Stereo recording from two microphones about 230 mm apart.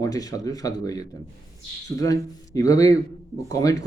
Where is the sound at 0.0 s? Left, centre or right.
Centre.